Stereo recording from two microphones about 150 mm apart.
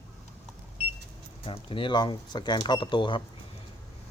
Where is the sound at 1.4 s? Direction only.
35° left (ahead or behind).